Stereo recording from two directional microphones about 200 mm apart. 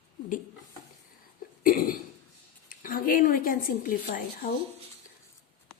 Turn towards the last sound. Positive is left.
turn(degrees=45)  # may be behind; listen again after turning